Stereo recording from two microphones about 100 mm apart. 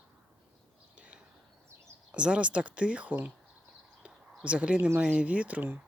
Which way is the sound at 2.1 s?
10° right (ahead or behind).